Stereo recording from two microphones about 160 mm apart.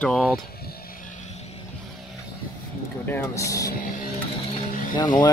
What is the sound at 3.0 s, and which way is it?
Speech, 15° left (ahead or behind).